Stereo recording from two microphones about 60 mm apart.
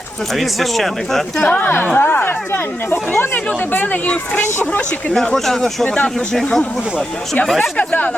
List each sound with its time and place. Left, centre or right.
0.3 s speech: centre
1.4 s a woman's voice: left
5.1 s speech: centre
7.8 s a woman's voice: left